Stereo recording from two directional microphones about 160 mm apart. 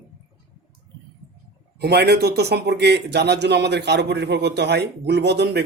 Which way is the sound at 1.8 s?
90° right.